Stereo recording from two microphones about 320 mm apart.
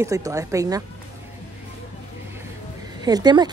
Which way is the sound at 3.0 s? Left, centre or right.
Centre.